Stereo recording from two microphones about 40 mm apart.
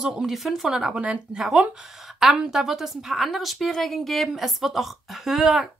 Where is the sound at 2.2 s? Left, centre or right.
Centre.